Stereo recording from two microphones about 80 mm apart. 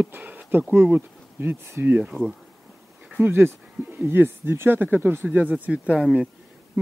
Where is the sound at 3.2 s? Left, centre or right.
Right.